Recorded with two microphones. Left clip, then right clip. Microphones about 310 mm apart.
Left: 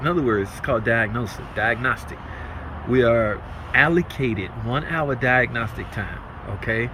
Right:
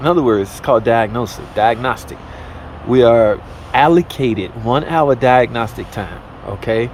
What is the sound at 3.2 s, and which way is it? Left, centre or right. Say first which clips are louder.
Speech: right 10 dB; centre.